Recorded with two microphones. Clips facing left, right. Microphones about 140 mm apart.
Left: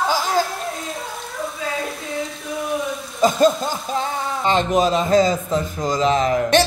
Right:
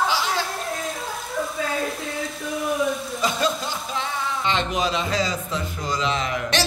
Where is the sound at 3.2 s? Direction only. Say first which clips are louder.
Left 9 dB; 45° left (ahead or behind).